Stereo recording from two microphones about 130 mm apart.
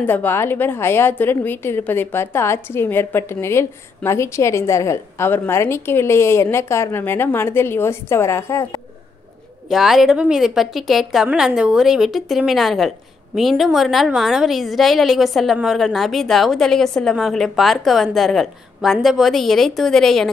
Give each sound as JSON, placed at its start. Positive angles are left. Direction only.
{"t": 0.0, "sound": "a woman's voice", "side_deg": 15}
{"t": 9.7, "sound": "a woman's voice", "side_deg": -5}